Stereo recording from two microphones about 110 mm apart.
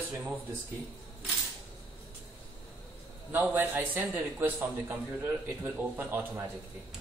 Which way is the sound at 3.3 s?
15° right (ahead or behind).